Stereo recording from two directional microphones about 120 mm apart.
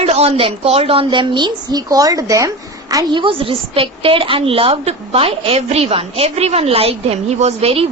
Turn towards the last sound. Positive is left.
turn(degrees=-55)  # may be behind; listen again after turning